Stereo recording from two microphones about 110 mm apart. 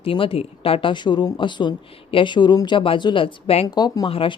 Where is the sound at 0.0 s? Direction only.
55° left (ahead or behind).